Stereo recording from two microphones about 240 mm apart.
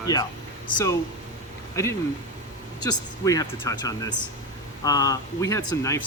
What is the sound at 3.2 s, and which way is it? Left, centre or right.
Speech, centre.